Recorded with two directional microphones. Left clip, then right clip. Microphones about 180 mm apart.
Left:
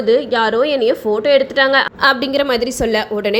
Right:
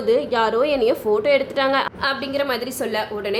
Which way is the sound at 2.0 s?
40° left (ahead or behind).